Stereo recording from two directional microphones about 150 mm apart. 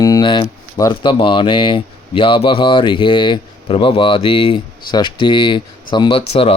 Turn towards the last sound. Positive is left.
turn(degrees=35)  # may be behind; listen again after turning